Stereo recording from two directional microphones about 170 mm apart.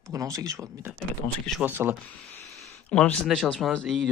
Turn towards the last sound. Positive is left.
turn(degrees=0)  # may be behind; listen again after turning